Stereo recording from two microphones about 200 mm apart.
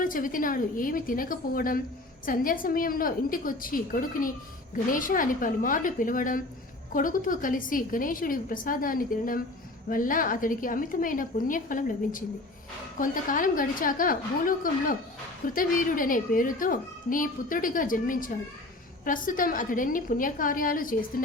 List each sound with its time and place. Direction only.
0.0 s a child's voice: 45° left (ahead or behind)